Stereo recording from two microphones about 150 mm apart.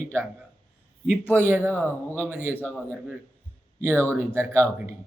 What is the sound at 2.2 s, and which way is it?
Speech, 15° right (ahead or behind).